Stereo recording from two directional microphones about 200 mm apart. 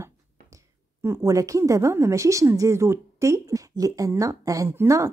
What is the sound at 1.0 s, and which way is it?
A woman's voice, 15° right (ahead or behind).